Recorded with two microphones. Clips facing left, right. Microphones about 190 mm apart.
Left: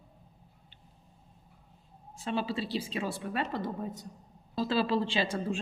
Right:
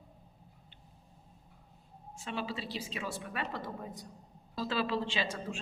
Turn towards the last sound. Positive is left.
turn(degrees=30)  # may be behind; listen again after turning